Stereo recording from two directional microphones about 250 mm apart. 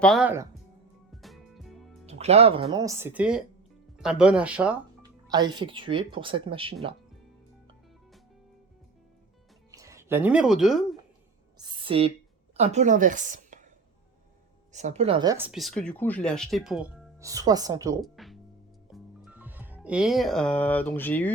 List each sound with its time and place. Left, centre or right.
0.0 s speech: centre
1.1 s music: centre
2.0 s speech: right
2.7 s speech: centre
5.0 s speech: centre
9.7 s speech: centre
11.5 s a sound: centre
12.5 s a woman's voice: right
14.7 s speech: right; by 18.0 s centre
18.0 s music: centre